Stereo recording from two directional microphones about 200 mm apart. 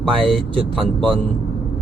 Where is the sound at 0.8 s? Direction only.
Centre (ahead or behind).